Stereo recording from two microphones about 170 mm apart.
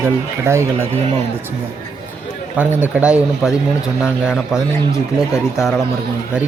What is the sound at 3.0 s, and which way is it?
Speech, 5° right (ahead or behind).